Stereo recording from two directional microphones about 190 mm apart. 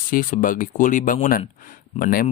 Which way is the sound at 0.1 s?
45° left (ahead or behind).